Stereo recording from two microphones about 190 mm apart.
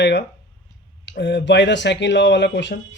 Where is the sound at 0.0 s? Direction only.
65° left (ahead or behind).